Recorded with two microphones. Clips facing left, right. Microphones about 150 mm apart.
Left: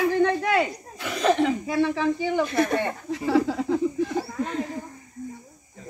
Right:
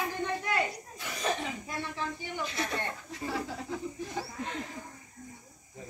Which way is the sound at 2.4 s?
55° left (ahead or behind).